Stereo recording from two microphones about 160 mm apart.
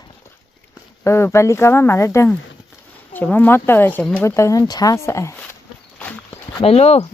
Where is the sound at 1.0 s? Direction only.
15° left (ahead or behind).